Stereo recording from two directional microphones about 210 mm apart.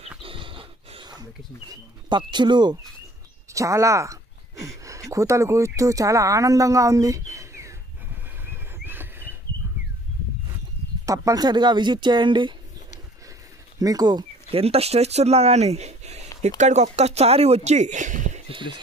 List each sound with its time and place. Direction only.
0.2 s dog: 25° right (ahead or behind)
1.7 s speech: 20° right (ahead or behind)
8.5 s a sound: 10° right (ahead or behind)
11.1 s speech: 15° right (ahead or behind)
13.7 s speech: 15° right (ahead or behind); by 18.4 s 35° right (ahead or behind)
18.5 s speech: 25° right (ahead or behind)